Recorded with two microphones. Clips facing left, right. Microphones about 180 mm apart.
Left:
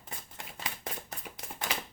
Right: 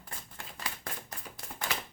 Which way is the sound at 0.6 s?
20° left (ahead or behind).